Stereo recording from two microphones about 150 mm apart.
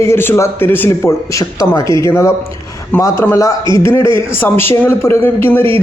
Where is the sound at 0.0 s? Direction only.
15° left (ahead or behind).